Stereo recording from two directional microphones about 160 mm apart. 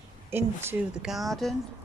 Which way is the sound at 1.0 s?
Centre (ahead or behind).